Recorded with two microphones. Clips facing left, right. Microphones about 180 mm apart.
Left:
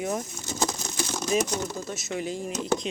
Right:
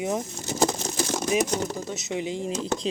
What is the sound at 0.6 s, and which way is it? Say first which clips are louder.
Patter: right 5 dB; 25° right (ahead or behind).